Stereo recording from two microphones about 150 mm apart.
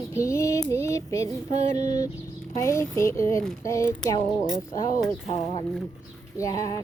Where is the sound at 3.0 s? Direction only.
20° left (ahead or behind).